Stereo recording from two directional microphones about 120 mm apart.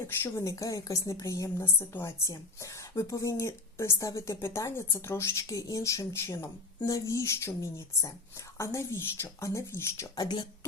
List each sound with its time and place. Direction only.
0.2 s a woman's voice: 25° left (ahead or behind)